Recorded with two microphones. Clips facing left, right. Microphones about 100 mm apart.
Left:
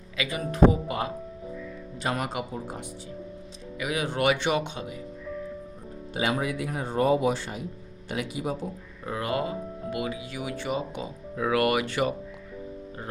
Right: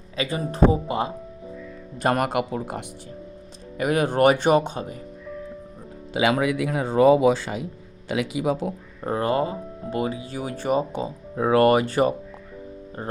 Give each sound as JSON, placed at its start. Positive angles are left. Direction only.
{"t": 0.2, "sound": "speech", "side_deg": -35}
{"t": 2.0, "sound": "speech", "side_deg": -55}
{"t": 3.8, "sound": "speech", "side_deg": -50}
{"t": 6.1, "sound": "speech", "side_deg": -90}
{"t": 8.1, "sound": "speech", "side_deg": -90}
{"t": 9.0, "sound": "speech", "side_deg": -35}